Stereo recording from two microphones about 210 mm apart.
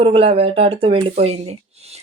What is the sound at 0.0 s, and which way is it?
Speech, 25° right (ahead or behind).